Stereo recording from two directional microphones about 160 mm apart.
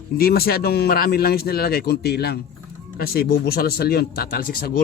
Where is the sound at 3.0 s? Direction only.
70° left (ahead or behind).